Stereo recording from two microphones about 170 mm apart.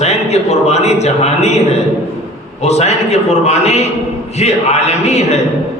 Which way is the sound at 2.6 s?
40° left (ahead or behind).